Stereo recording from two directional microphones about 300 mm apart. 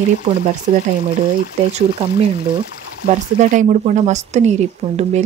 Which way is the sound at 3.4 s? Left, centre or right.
Right.